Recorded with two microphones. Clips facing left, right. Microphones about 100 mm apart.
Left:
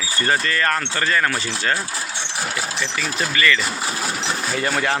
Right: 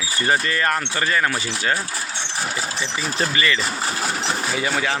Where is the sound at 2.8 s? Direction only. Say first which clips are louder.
Right 2 dB; 20° right (ahead or behind).